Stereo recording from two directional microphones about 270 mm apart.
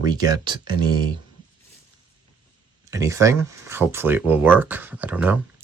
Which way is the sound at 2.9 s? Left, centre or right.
Centre.